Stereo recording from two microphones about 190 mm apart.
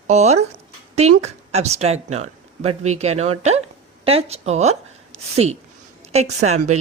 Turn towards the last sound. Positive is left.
turn(degrees=-35)  # may be behind; listen again after turning